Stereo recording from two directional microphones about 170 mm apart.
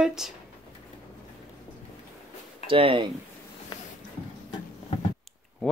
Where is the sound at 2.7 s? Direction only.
30° right (ahead or behind).